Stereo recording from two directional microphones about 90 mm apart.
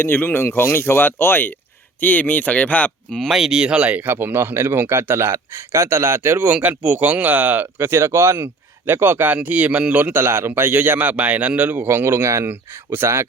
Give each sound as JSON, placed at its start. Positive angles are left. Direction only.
{"t": 0.0, "sound": "speech", "side_deg": 25}
{"t": 3.2, "sound": "a man's voice", "side_deg": 0}